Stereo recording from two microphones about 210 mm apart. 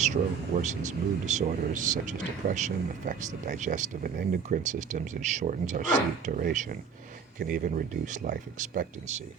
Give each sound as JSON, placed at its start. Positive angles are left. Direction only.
{"t": 0.5, "sound": "speech", "side_deg": -35}